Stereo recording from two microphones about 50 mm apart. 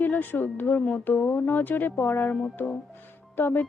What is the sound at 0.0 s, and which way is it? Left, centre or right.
Speech, left.